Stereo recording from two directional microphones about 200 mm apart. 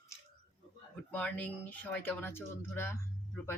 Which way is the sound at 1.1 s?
5° left (ahead or behind).